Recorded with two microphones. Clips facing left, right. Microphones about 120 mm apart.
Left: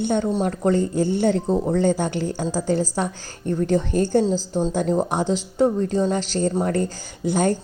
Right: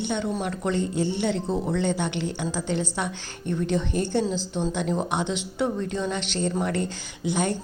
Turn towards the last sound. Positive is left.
turn(degrees=45)  # may be behind; listen again after turning